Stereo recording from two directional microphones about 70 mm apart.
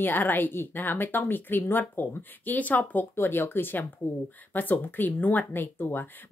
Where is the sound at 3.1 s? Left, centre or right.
Left.